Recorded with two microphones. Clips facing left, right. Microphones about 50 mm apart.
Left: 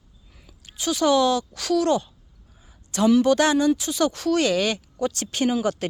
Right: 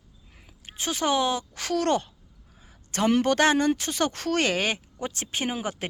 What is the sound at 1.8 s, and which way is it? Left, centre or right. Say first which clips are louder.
Speech: left 3 dB; right.